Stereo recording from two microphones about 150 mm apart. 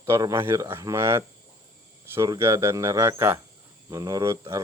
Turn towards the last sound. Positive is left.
turn(degrees=-20)  # may be behind; listen again after turning